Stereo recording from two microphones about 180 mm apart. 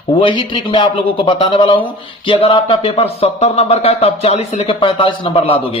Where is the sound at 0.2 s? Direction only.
25° left (ahead or behind).